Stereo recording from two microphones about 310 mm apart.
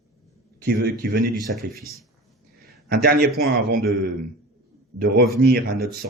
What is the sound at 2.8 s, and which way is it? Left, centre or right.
A man's voice, right.